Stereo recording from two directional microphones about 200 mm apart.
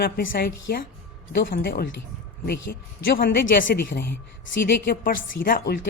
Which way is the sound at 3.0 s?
50° left (ahead or behind).